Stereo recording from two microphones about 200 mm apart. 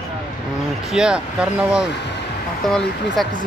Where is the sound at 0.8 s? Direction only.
Centre (ahead or behind).